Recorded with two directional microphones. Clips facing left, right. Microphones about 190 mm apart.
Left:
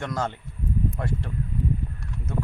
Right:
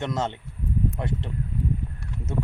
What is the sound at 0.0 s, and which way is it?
Speech, 25° right (ahead or behind).